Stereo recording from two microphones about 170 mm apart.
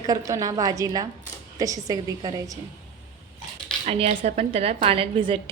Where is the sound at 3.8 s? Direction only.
35° right (ahead or behind).